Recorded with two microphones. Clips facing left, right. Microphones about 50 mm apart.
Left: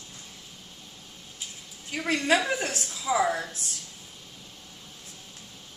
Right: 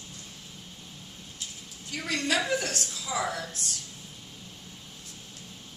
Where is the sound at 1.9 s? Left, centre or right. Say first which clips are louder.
Left 5 dB; left.